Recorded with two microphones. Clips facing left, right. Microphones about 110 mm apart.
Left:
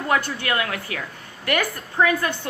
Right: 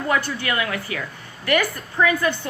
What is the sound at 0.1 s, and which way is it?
Speech, 50° left (ahead or behind).